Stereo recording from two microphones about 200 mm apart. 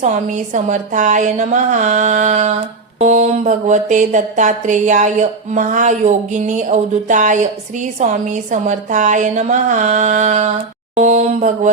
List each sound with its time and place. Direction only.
0.0 s mantra: 40° right (ahead or behind)